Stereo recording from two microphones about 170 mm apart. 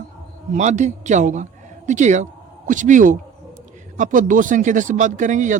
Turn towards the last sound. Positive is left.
turn(degrees=-50)  # may be behind; listen again after turning